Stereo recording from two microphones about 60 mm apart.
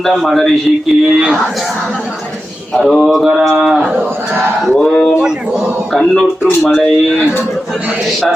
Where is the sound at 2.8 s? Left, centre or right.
Centre.